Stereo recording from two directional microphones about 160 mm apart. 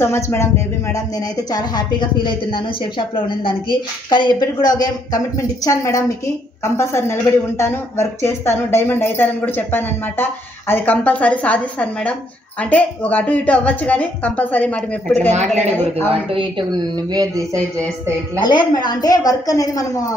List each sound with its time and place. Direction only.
0.0 s speech: 15° left (ahead or behind)
15.3 s a woman's voice: 45° right (ahead or behind)
15.7 s speech: 15° left (ahead or behind)
16.1 s speech: 35° right (ahead or behind); by 17.8 s 20° right (ahead or behind)
18.4 s a woman's voice: 25° left (ahead or behind)